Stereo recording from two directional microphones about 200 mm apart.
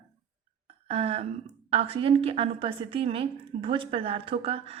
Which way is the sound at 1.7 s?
30° right (ahead or behind).